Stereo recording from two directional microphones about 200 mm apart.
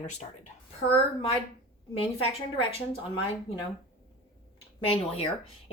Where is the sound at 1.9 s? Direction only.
25° left (ahead or behind).